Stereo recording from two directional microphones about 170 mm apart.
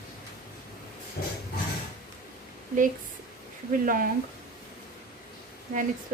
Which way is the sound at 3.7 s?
55° right (ahead or behind).